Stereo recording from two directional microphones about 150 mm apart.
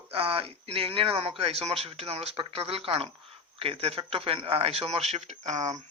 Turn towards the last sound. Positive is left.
turn(degrees=-50)  # may be behind; listen again after turning